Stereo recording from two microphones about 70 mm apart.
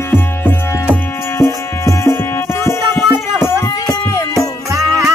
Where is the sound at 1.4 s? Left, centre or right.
Left.